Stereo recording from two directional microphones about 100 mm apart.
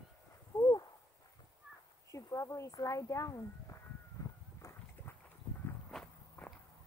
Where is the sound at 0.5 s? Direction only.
30° left (ahead or behind).